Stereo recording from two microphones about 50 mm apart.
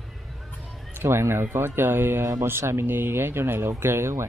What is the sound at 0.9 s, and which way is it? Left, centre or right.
Speech, right.